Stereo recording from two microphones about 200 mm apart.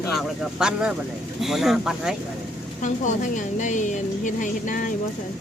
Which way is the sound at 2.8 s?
40° left (ahead or behind).